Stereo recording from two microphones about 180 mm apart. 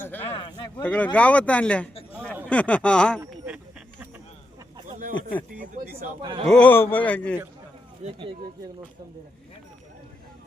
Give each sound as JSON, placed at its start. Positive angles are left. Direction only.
{"t": 0.0, "sound": "speech", "side_deg": 10}
{"t": 0.3, "sound": "a man's voice", "side_deg": 25}
{"t": 0.8, "sound": "speech", "side_deg": 10}
{"t": 3.4, "sound": "a sound", "side_deg": -5}
{"t": 5.5, "sound": "speech", "side_deg": -55}
{"t": 6.2, "sound": "a man's voice", "side_deg": -25}
{"t": 6.5, "sound": "speech", "side_deg": 10}
{"t": 8.0, "sound": "speech", "side_deg": -35}